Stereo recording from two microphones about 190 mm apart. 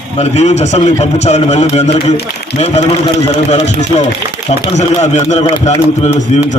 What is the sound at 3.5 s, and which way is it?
Speech, 35° left (ahead or behind).